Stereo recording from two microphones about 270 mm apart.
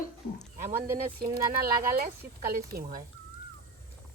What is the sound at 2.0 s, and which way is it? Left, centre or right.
Speech, right.